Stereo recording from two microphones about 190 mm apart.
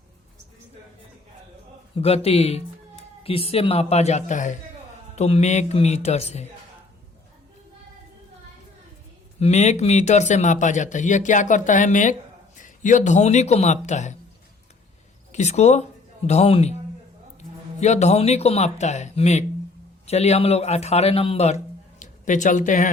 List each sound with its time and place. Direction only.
2.0 s a man's voice: 30° left (ahead or behind)
9.4 s a man's voice: 35° left (ahead or behind)
15.3 s a man's voice: 35° left (ahead or behind)
17.7 s a man's voice: 35° left (ahead or behind)